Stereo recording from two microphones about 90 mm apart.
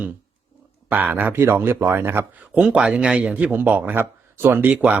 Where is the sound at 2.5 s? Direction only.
10° right (ahead or behind).